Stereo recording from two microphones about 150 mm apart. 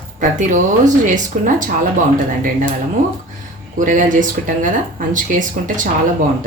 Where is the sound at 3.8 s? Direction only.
60° right (ahead or behind).